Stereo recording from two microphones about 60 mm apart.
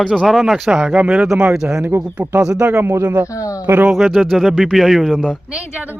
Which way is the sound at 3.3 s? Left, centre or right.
Left.